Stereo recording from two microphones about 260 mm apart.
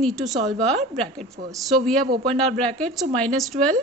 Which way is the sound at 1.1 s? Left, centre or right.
Right.